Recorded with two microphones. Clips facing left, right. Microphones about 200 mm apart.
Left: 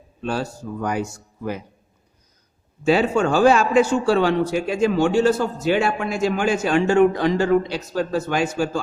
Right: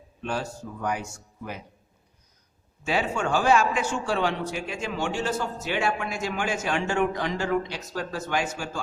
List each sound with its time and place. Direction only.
0.3 s a man's voice: 35° left (ahead or behind)
3.0 s a man's voice: 35° left (ahead or behind)